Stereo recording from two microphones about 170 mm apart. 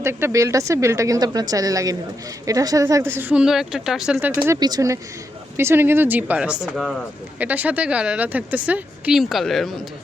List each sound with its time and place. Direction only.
0.0 s a woman's voice: 15° right (ahead or behind)
4.6 s a woman's voice: 20° right (ahead or behind); by 9.7 s centre (ahead or behind)